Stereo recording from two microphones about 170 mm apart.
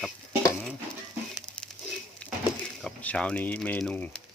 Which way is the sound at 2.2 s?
5° left (ahead or behind).